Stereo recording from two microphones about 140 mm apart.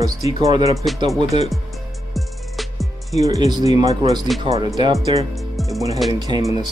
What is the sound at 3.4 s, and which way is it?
Speech, 25° right (ahead or behind).